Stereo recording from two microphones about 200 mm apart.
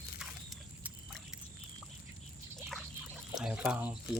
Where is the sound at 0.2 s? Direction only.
Centre (ahead or behind).